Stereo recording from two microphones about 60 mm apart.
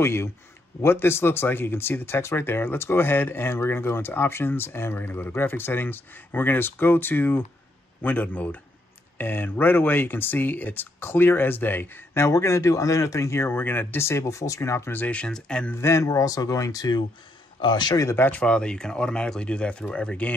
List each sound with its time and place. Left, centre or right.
0.0 s speech: left
12.3 s speech: left
13.4 s speech: left
14.0 s speech: left
14.6 s speech: left
15.0 s speech: centre
15.7 s speech: left
16.1 s speech: left
18.1 s speech: left
18.4 s speech: centre